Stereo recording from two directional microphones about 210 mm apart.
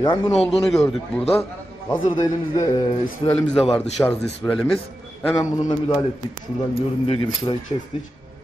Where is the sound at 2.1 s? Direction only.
20° left (ahead or behind).